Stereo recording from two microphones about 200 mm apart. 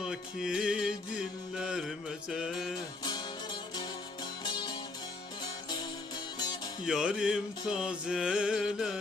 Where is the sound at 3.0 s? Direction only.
20° left (ahead or behind).